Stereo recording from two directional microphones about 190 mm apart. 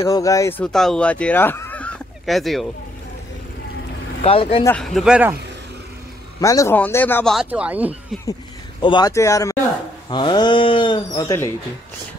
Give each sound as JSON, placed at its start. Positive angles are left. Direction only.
{"t": 0.0, "sound": "speech", "side_deg": 15}
{"t": 4.2, "sound": "speech", "side_deg": 30}
{"t": 4.6, "sound": "speech", "side_deg": 5}
{"t": 6.4, "sound": "speech", "side_deg": 15}
{"t": 7.3, "sound": "speech", "side_deg": -5}
{"t": 8.8, "sound": "speech", "side_deg": 20}